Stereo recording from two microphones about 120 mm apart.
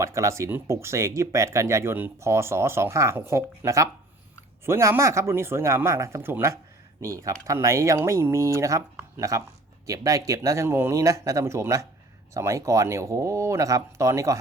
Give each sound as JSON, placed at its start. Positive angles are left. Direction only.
{"t": 0.0, "sound": "speech", "side_deg": -25}